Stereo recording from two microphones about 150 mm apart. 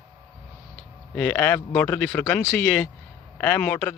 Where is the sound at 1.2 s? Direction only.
10° left (ahead or behind).